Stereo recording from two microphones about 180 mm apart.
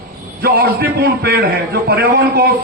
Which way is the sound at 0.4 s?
55° right (ahead or behind).